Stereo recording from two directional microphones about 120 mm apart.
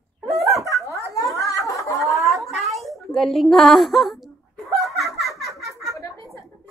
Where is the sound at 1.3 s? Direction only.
25° left (ahead or behind).